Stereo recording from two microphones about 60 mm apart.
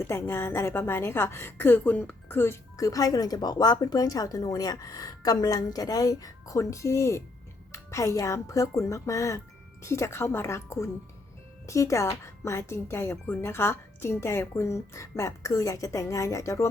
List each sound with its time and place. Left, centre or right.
0.0 s a woman's voice: left
1.8 s speech: left
2.3 s a woman's voice: left
2.7 s speech: left
9.8 s a woman's voice: left